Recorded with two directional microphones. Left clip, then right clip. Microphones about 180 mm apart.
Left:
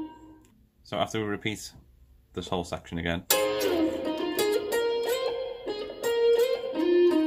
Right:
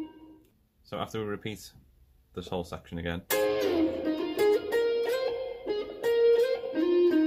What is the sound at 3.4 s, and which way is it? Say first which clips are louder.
Music: right 3 dB; 35° right (ahead or behind).